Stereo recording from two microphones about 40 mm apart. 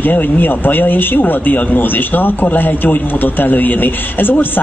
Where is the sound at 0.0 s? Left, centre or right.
Left.